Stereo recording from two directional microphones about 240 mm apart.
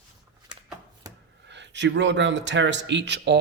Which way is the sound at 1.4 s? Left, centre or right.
Right.